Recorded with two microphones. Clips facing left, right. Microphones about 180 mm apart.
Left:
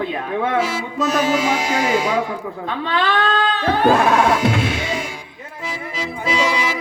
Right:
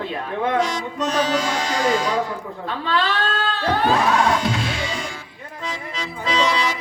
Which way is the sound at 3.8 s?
55° left (ahead or behind).